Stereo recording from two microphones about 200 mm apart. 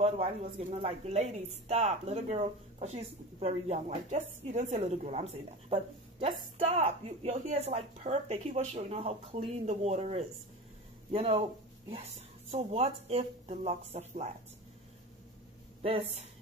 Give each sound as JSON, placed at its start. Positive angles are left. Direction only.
{"t": 0.0, "sound": "speech", "side_deg": -30}
{"t": 15.8, "sound": "a woman's voice", "side_deg": -30}